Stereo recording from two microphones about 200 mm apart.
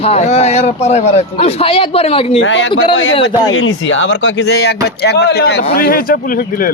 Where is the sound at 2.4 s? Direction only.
70° left (ahead or behind); by 6.7 s 45° left (ahead or behind).